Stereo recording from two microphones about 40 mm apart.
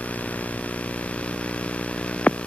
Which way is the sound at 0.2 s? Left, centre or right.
Left.